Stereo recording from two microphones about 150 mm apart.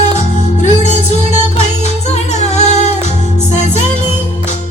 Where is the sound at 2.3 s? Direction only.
50° left (ahead or behind).